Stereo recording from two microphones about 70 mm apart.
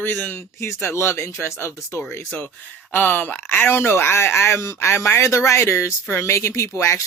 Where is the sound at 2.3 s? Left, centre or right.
Left.